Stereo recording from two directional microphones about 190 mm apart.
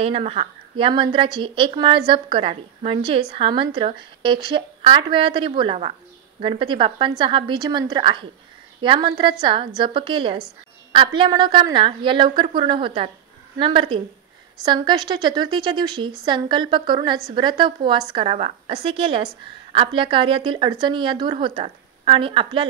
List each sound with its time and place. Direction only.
0.0 s speech: 30° right (ahead or behind)